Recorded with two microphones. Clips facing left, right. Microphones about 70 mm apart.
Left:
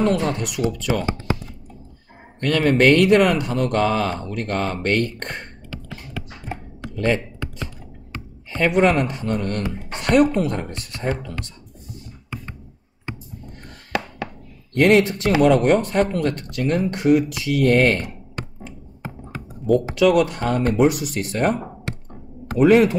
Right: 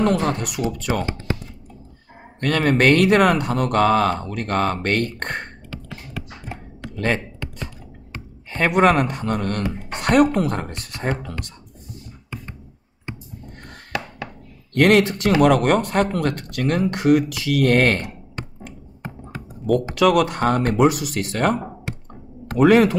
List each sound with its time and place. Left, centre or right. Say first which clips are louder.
0.0 s speech: even; right
2.4 s speech: left 1 dB; right
8.5 s speech: right 1 dB; right
14.7 s speech: even; right
19.6 s speech: left 1 dB; right
22.6 s speech: even; right